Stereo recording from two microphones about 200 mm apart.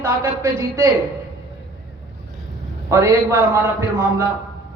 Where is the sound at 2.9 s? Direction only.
15° right (ahead or behind).